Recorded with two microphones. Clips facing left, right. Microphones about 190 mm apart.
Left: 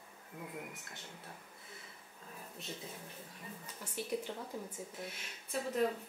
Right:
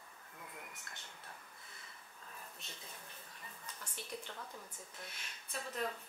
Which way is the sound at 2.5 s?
5° left (ahead or behind).